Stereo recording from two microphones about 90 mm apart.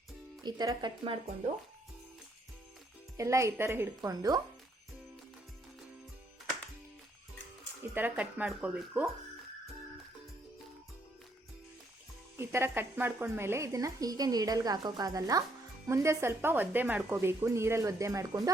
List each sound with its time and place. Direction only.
0.4 s speech: 45° right (ahead or behind)
3.2 s a woman's voice: 35° right (ahead or behind)
4.1 s speech: 45° right (ahead or behind)
7.9 s speech: 20° right (ahead or behind)
12.4 s a woman's voice: 25° right (ahead or behind)
15.9 s a woman's voice: 30° right (ahead or behind)